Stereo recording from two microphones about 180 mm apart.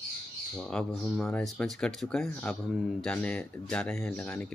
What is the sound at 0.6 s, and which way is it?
Speech, 5° left (ahead or behind).